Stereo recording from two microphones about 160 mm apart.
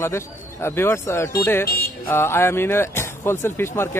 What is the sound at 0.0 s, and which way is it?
Speech, 15° left (ahead or behind).